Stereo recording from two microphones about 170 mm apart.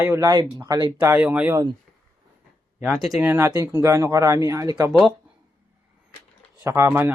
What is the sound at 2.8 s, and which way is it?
Speech, 5° right (ahead or behind).